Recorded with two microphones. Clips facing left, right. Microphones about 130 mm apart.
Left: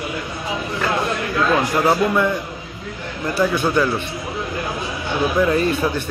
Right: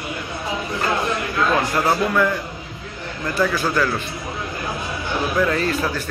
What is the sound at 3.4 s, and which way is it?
Speech, 20° left (ahead or behind).